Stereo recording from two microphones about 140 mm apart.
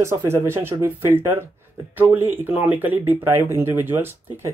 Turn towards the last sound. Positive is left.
turn(degrees=-15)  # may be behind; listen again after turning